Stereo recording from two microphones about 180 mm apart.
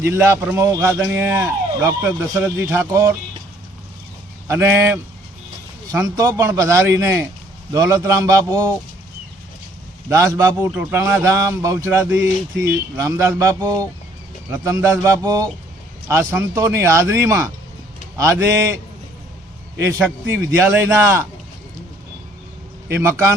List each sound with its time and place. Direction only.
0.0 s speech: 15° right (ahead or behind)
4.4 s speech: 15° right (ahead or behind)
10.1 s speech: 15° right (ahead or behind)
20.7 s speech: 10° right (ahead or behind)
22.9 s speech: 15° right (ahead or behind)